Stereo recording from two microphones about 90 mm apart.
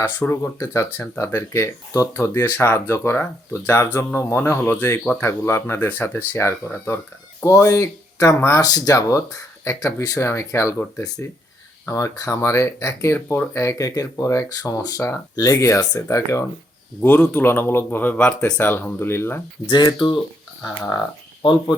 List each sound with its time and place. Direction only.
0.0 s speech: 25° left (ahead or behind)
0.4 s speech: 35° left (ahead or behind)
0.9 s speech: 20° left (ahead or behind)
1.2 s speech: 35° left (ahead or behind)
8.6 s speech: 45° left (ahead or behind)
11.9 s speech: 40° left (ahead or behind)
17.0 s speech: 20° left (ahead or behind)
18.7 s speech: 25° left (ahead or behind)
19.7 s speech: 55° left (ahead or behind)